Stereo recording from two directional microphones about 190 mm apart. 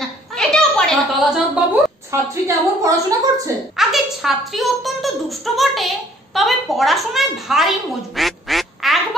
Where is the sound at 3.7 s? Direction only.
Centre (ahead or behind).